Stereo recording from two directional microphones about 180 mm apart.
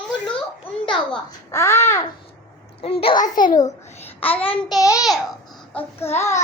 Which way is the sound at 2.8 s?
30° left (ahead or behind).